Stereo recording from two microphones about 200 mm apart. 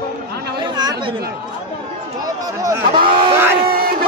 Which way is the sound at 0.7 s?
20° right (ahead or behind).